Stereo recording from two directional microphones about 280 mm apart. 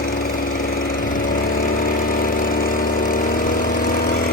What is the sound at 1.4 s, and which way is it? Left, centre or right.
Vehicle, left.